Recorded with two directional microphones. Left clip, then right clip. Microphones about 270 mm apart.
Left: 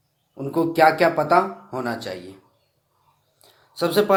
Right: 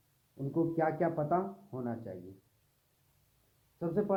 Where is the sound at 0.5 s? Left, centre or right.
Centre.